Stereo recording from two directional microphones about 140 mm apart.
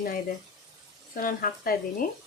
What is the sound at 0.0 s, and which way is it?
Speech, 90° left.